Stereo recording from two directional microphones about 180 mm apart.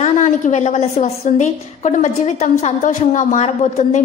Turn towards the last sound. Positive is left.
turn(degrees=40)  # may be behind; listen again after turning